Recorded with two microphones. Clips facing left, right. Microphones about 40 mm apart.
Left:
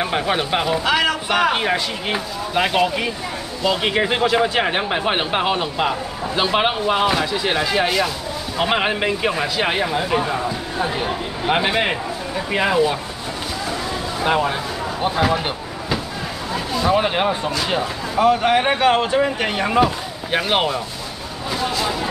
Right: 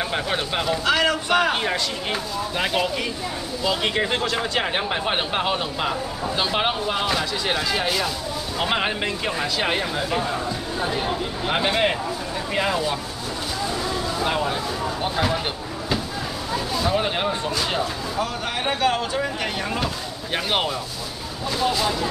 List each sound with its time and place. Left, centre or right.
0.0 s speech: centre
14.2 s speech: centre
15.0 s a sound: centre
16.8 s speech: centre
18.2 s speech: left
19.8 s speech: centre